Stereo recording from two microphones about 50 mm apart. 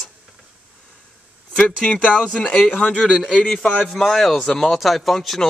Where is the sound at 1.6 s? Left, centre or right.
Left; by 3.3 s centre.